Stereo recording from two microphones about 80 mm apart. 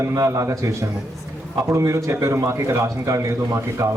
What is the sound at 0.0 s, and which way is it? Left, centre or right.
A man's voice, right.